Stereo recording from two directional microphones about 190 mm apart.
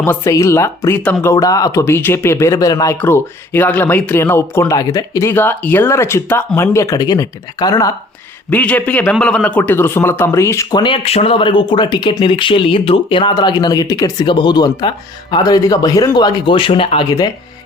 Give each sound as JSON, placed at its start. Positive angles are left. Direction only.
{"t": 0.0, "sound": "speech", "side_deg": 15}
{"t": 8.4, "sound": "a man's voice", "side_deg": 10}